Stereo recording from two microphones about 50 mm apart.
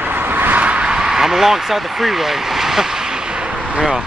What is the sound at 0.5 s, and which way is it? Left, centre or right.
Speech, right.